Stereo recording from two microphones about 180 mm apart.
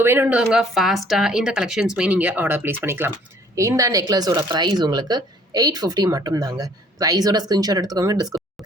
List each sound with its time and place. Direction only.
0.0 s speech: 10° right (ahead or behind)